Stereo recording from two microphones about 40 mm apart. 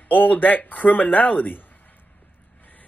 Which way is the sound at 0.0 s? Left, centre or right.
Left.